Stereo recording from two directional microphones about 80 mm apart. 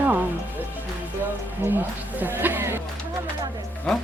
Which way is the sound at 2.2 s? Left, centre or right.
Right.